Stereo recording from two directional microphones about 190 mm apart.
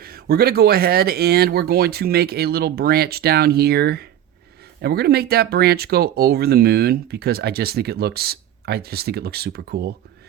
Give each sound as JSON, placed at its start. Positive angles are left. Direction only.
{"t": 0.0, "sound": "speech", "side_deg": -55}